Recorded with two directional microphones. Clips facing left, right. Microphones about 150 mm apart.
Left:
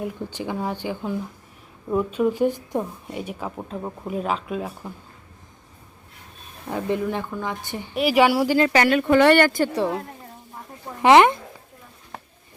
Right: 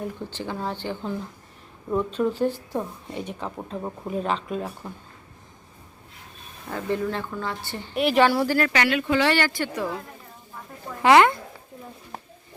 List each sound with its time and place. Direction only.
0.0 s a woman's voice: 15° left (ahead or behind)
6.7 s a woman's voice: 15° left (ahead or behind)
8.7 s speech: 45° left (ahead or behind)
9.7 s speech: 30° left (ahead or behind)
11.0 s speech: 20° left (ahead or behind)